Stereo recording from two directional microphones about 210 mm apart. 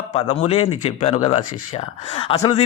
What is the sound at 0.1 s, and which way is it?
A man's voice, 30° left (ahead or behind).